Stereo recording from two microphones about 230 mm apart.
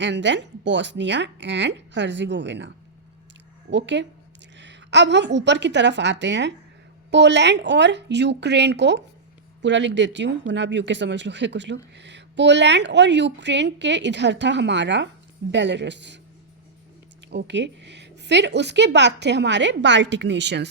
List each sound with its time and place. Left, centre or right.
0.0 s a woman's voice: right
17.3 s a woman's voice: right